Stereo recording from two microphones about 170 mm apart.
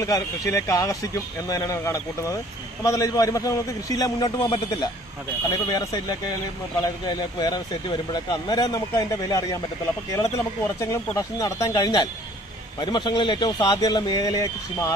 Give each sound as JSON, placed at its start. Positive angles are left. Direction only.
{"t": 0.0, "sound": "speech", "side_deg": 20}